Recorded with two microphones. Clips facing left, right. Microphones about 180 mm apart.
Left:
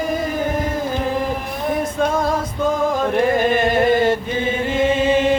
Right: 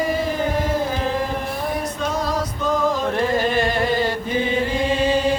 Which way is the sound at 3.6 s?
25° left (ahead or behind).